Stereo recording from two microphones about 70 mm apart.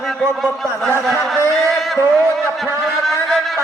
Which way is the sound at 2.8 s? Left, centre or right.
Centre.